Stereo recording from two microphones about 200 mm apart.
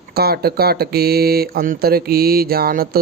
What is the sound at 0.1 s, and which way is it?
Speech, 50° right (ahead or behind).